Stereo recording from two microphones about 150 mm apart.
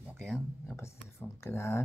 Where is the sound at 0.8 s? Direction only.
15° left (ahead or behind).